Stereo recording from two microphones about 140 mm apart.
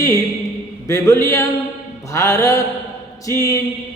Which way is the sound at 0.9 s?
20° left (ahead or behind).